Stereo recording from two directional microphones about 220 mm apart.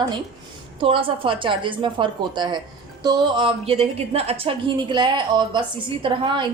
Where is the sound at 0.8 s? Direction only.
25° right (ahead or behind).